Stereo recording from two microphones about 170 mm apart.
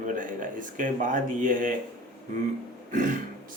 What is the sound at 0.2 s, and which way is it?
Speech, 50° right (ahead or behind).